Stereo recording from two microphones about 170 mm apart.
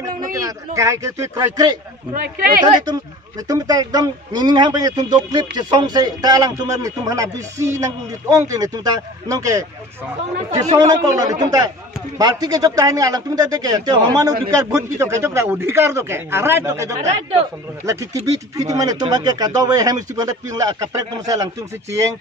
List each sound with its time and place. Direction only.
0.3 s a sound: 20° right (ahead or behind)
0.7 s a man's voice: 20° right (ahead or behind)
3.4 s a man's voice: 20° right (ahead or behind)
17.0 s speech: 35° right (ahead or behind)
17.8 s a man's voice: 15° right (ahead or behind)